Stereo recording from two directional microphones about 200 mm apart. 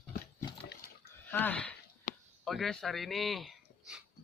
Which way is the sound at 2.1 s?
35° left (ahead or behind).